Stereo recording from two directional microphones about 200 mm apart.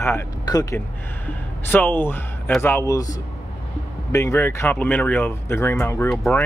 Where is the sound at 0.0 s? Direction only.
15° left (ahead or behind).